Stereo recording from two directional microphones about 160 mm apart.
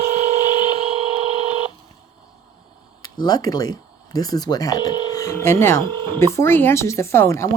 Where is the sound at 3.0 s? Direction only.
25° left (ahead or behind).